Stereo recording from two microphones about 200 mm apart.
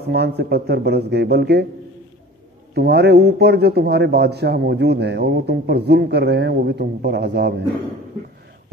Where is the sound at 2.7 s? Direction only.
55° right (ahead or behind).